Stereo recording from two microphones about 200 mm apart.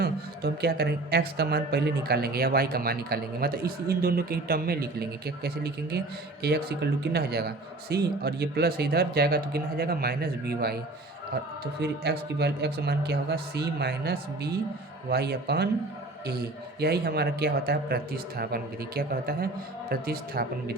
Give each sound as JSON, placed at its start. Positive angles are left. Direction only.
{"t": 0.0, "sound": "speech", "side_deg": -50}
{"t": 11.8, "sound": "speech", "side_deg": -55}
{"t": 16.8, "sound": "speech", "side_deg": -50}